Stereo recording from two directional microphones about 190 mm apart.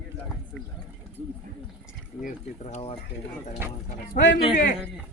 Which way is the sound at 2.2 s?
35° left (ahead or behind).